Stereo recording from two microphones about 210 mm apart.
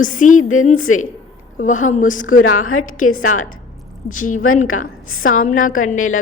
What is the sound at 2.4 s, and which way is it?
A woman's voice, 90° left.